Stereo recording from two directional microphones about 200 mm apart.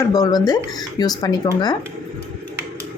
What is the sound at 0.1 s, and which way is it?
Speech, 20° left (ahead or behind).